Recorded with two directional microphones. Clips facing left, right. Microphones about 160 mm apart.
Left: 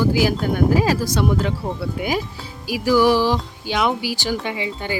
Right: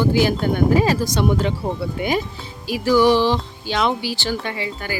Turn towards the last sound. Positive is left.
turn(degrees=20)  # may be behind; listen again after turning